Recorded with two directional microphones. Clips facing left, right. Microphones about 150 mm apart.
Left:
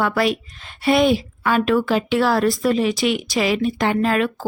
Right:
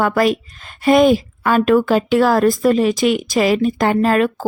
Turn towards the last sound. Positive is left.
turn(degrees=-45)  # may be behind; listen again after turning